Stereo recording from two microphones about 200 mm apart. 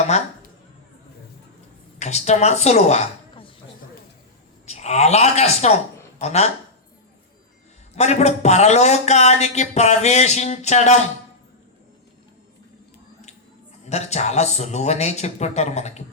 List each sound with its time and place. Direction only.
0.1 s a man's voice: 35° left (ahead or behind)
2.0 s speech: 35° left (ahead or behind)
4.6 s a man's voice: 35° left (ahead or behind)
7.9 s a man's voice: 35° left (ahead or behind)
13.9 s a man's voice: 35° left (ahead or behind)